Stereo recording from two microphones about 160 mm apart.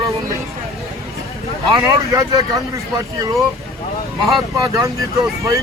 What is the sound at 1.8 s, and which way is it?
Speech, 20° right (ahead or behind).